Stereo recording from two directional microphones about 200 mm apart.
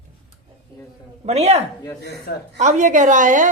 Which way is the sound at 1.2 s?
30° right (ahead or behind).